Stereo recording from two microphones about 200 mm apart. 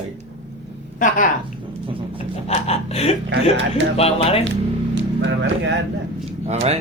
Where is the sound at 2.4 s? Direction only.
30° left (ahead or behind).